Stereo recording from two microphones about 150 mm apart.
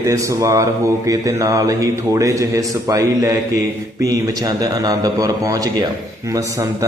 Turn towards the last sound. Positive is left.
turn(degrees=-25)  # may be behind; listen again after turning